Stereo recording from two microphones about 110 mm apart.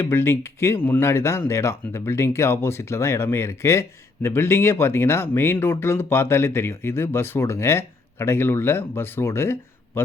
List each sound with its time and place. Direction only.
0.0 s speech: 20° left (ahead or behind)